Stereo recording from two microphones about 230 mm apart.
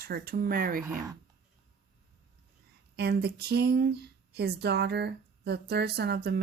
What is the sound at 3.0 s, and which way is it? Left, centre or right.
Speech, right.